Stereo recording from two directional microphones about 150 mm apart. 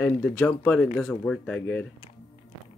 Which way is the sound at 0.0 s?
15° left (ahead or behind).